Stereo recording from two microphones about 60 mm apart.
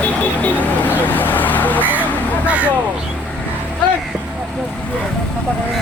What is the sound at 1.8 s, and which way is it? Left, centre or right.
Vehicle, right.